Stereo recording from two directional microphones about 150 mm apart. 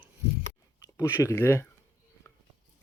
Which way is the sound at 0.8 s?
20° left (ahead or behind).